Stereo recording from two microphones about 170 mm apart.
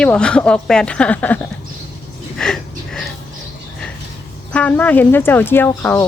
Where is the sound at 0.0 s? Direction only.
5° left (ahead or behind).